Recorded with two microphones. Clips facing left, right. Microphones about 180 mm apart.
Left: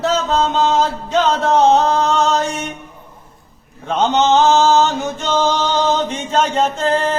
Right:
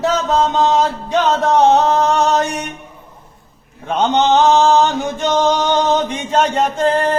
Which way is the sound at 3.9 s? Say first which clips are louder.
Even; 15° right (ahead or behind).